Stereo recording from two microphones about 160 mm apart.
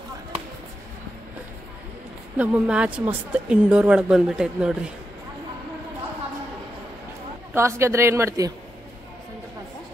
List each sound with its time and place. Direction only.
2.3 s a woman's voice: 10° right (ahead or behind)
7.5 s a woman's voice: 15° right (ahead or behind)